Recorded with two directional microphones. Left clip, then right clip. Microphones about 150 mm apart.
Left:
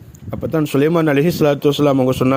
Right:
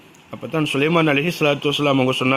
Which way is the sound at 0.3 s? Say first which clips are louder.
Left 3 dB; 45° left (ahead or behind).